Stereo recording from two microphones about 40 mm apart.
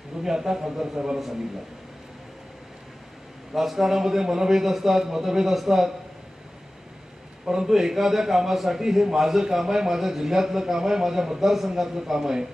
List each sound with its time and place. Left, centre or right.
0.2 s a man's voice: centre
3.5 s a man's voice: centre
7.4 s a man's voice: centre